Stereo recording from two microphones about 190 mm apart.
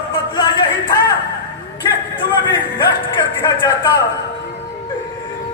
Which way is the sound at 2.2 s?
25° left (ahead or behind).